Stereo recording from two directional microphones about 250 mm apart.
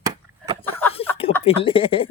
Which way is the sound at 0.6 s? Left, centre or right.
Centre.